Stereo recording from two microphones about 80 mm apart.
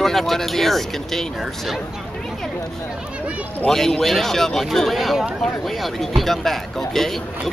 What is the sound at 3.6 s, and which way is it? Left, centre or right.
Speech, centre.